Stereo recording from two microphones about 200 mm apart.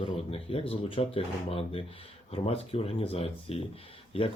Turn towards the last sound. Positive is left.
turn(degrees=25)  # may be behind; listen again after turning